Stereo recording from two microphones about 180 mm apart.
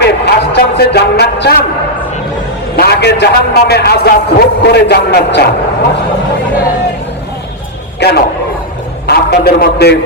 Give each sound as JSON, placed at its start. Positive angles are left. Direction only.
{"t": 0.0, "sound": "a man's voice", "side_deg": 70}
{"t": 2.7, "sound": "a man's voice", "side_deg": 60}
{"t": 7.9, "sound": "a man's voice", "side_deg": 65}